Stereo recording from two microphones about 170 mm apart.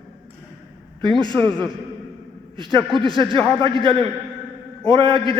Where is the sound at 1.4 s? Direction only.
5° left (ahead or behind).